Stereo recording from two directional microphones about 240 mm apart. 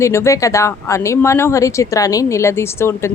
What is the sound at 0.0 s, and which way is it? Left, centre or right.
A woman's voice, centre.